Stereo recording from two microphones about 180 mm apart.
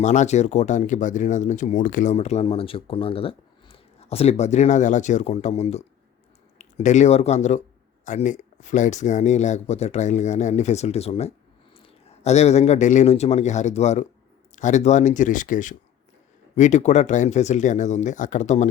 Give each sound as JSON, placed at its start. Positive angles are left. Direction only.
{"t": 0.0, "sound": "a man's voice", "side_deg": 40}